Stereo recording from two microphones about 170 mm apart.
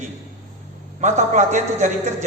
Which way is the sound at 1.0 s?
45° right (ahead or behind).